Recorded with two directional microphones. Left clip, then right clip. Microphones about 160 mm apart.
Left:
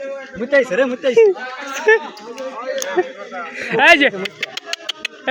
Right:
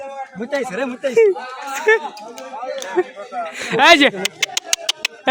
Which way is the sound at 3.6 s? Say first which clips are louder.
Even; 35° right (ahead or behind).